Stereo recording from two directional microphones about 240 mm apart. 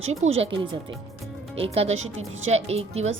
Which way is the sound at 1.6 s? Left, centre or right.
Right.